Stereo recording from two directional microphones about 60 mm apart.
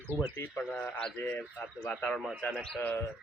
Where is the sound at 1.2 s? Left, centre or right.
Left.